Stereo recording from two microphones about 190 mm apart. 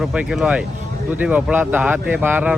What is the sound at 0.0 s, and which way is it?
Speech, 5° right (ahead or behind).